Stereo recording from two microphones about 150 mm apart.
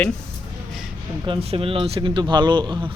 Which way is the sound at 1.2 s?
40° right (ahead or behind).